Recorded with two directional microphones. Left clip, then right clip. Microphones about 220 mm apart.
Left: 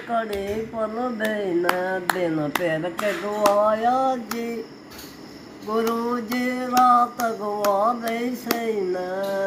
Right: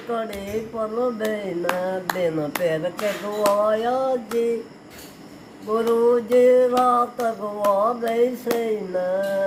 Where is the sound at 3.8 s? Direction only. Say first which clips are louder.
Left 2 dB; 5° right (ahead or behind).